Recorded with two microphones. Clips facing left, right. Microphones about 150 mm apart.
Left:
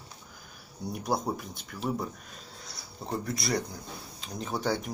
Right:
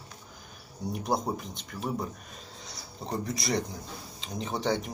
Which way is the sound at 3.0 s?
Centre (ahead or behind).